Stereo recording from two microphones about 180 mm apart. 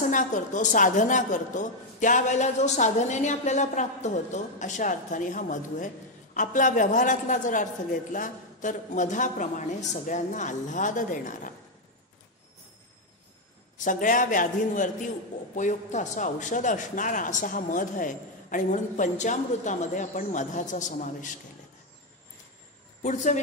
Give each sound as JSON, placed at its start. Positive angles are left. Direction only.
{"t": 0.1, "sound": "a woman's voice", "side_deg": 45}
{"t": 13.7, "sound": "a woman's voice", "side_deg": 45}
{"t": 23.0, "sound": "speech", "side_deg": 40}